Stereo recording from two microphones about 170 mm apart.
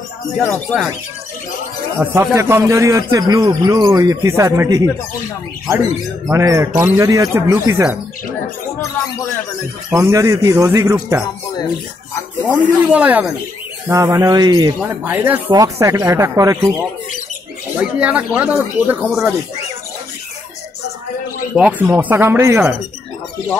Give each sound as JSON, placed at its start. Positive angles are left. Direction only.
{"t": 0.4, "sound": "speech", "side_deg": 10}
{"t": 2.0, "sound": "speech", "side_deg": -15}
{"t": 6.3, "sound": "speech", "side_deg": -15}
{"t": 9.9, "sound": "speech", "side_deg": -20}
{"t": 12.2, "sound": "speech", "side_deg": 10}
{"t": 12.5, "sound": "speech", "side_deg": -10}
{"t": 14.8, "sound": "speech", "side_deg": -10}
{"t": 17.7, "sound": "speech", "side_deg": -10}
{"t": 21.5, "sound": "speech", "side_deg": -10}